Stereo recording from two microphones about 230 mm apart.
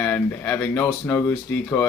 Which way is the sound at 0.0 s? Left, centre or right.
Centre.